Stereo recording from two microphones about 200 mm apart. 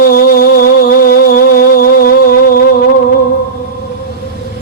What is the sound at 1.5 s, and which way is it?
Music, 45° left (ahead or behind).